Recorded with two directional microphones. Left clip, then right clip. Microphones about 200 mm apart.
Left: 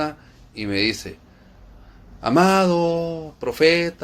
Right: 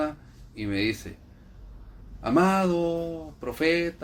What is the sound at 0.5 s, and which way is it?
Speech, 40° left (ahead or behind).